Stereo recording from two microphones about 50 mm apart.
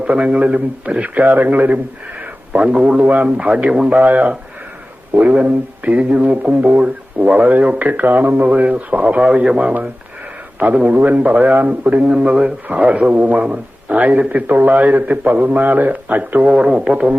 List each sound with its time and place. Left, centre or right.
0.0 s speech: right
2.2 s a man's voice: right
3.8 s speech: right
5.3 s a man's voice: right
12.0 s speech: centre
12.6 s a man's voice: right